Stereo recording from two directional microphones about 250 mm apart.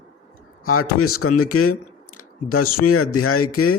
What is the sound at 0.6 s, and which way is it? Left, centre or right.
Speech, left.